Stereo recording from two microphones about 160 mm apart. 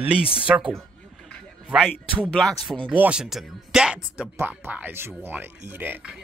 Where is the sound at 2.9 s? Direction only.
10° right (ahead or behind).